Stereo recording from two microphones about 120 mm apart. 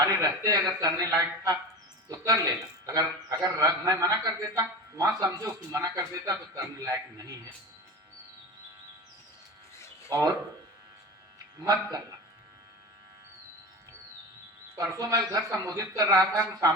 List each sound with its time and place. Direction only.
0.0 s a man's voice: 30° right (ahead or behind)
9.7 s a sound: 25° left (ahead or behind)
10.1 s speech: 35° right (ahead or behind)
11.6 s a man's voice: 30° right (ahead or behind)
14.8 s a man's voice: 30° right (ahead or behind)